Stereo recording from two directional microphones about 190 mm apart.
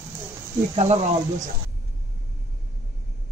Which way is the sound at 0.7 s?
35° right (ahead or behind).